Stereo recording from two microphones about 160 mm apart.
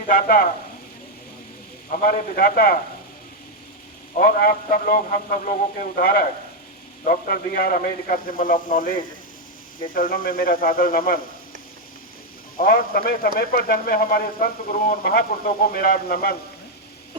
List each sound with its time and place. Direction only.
0.1 s speech: 65° left (ahead or behind)
1.9 s a man's voice: 55° left (ahead or behind)
4.1 s a man's voice: 60° left (ahead or behind)
12.5 s a man's voice: 65° left (ahead or behind)